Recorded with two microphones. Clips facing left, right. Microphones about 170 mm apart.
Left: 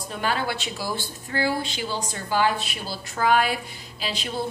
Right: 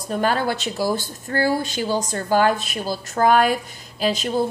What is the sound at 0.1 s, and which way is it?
A woman's voice, 45° right (ahead or behind).